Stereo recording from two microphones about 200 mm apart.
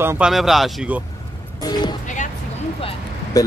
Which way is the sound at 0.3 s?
Centre (ahead or behind).